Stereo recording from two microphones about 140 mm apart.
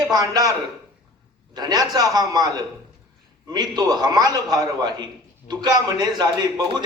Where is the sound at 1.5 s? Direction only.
30° right (ahead or behind).